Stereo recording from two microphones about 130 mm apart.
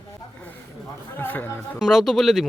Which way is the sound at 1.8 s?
Centre (ahead or behind).